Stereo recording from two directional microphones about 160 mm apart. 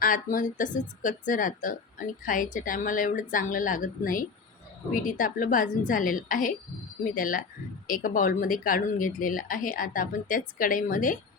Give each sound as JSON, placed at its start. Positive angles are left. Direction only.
{"t": 0.0, "sound": "speech", "side_deg": 60}